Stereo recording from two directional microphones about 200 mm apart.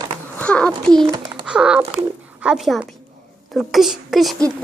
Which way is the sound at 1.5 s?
5° right (ahead or behind).